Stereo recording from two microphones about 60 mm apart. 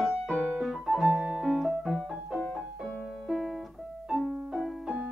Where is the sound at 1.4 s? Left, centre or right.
Centre.